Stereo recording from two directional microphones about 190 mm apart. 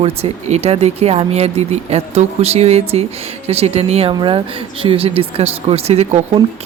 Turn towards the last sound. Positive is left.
turn(degrees=-35)  # may be behind; listen again after turning